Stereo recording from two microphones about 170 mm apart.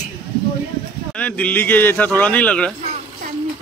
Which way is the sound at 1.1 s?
10° left (ahead or behind).